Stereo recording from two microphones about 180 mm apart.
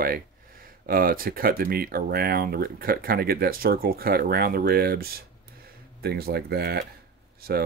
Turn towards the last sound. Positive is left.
turn(degrees=-55)  # may be behind; listen again after turning